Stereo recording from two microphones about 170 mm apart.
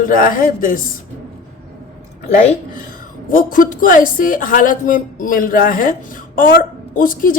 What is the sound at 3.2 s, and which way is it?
Speech, 55° left (ahead or behind).